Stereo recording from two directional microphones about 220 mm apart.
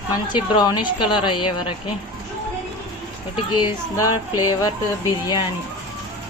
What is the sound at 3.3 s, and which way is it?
Speech, 20° left (ahead or behind).